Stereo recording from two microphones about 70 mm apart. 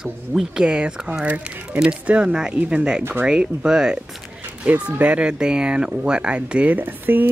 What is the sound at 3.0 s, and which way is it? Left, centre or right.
Speech, right.